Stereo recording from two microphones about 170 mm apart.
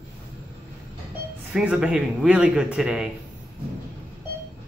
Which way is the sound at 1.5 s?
5° right (ahead or behind).